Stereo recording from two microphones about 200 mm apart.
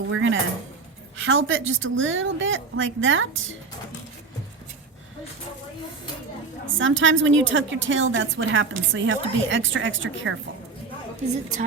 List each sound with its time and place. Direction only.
0.1 s a woman's voice: 80° right
6.7 s a woman's voice: 70° right (ahead or behind)